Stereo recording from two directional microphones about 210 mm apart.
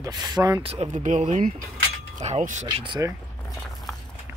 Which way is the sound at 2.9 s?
15° right (ahead or behind).